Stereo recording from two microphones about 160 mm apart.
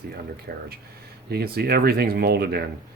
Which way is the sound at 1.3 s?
75° right (ahead or behind).